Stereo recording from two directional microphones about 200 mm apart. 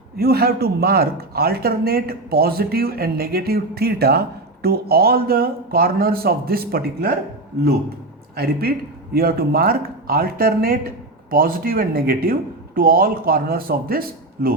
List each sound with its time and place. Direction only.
0.2 s speech: 50° right (ahead or behind)
9.1 s speech: 50° right (ahead or behind)